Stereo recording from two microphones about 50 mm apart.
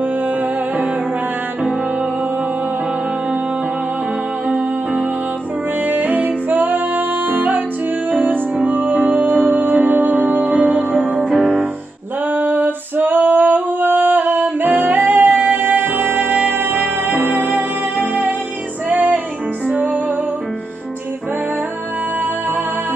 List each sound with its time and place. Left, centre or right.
4.5 s music: right
12.3 s a sound: right
18.9 s music: right